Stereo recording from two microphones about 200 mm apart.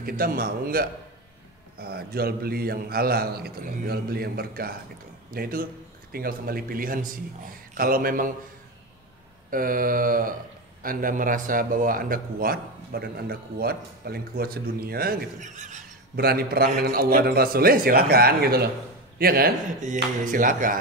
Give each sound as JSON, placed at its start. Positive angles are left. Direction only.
{"t": 0.0, "sound": "a man's voice", "side_deg": -50}
{"t": 9.5, "sound": "a man's voice", "side_deg": -45}